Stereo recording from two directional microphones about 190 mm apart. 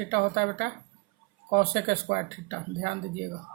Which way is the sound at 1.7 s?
55° right (ahead or behind).